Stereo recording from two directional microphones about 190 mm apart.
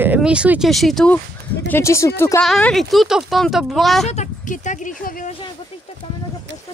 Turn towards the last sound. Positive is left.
turn(degrees=45)  # may be behind; listen again after turning